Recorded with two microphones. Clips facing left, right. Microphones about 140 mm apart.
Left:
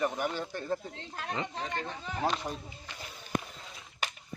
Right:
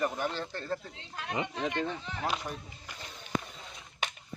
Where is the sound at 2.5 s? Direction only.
35° left (ahead or behind).